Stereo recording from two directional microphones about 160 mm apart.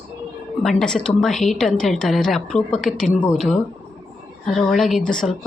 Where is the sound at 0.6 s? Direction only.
5° left (ahead or behind).